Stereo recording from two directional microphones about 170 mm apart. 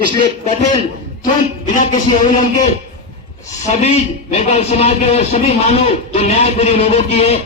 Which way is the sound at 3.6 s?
40° left (ahead or behind).